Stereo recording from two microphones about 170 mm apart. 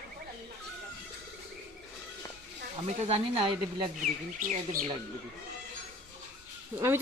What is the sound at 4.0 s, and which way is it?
Speech, 50° right (ahead or behind).